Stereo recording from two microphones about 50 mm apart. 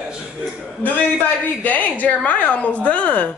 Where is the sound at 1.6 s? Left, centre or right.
Left.